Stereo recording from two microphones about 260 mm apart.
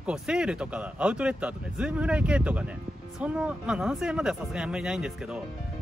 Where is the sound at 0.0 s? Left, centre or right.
Centre.